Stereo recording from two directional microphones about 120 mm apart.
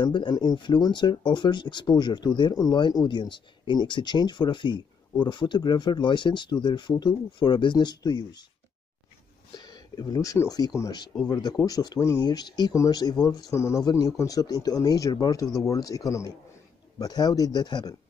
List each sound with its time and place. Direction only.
0.0 s speech: 40° left (ahead or behind)
9.5 s speech: 35° left (ahead or behind)